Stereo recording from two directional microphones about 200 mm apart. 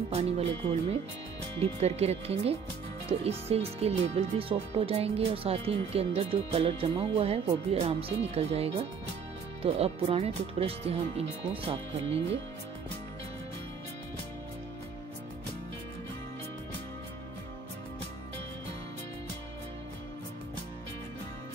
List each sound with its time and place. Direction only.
0.1 s speech: 30° right (ahead or behind)